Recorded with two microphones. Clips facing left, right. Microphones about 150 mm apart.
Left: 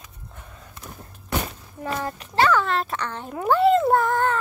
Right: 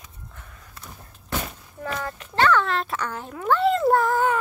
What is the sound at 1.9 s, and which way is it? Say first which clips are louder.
Speech: left 2 dB; 30° left (ahead or behind).